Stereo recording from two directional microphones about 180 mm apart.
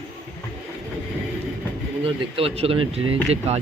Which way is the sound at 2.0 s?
30° right (ahead or behind).